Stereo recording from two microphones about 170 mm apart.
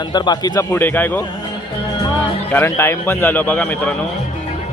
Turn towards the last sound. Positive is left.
turn(degrees=10)  # may be behind; listen again after turning